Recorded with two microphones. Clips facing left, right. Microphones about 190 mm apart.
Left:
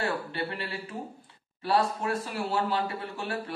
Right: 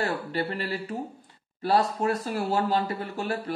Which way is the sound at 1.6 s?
40° right (ahead or behind).